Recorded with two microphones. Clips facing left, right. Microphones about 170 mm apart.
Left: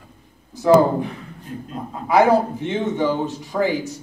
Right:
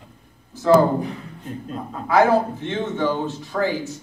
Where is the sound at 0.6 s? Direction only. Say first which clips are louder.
Left 1 dB; 15° left (ahead or behind).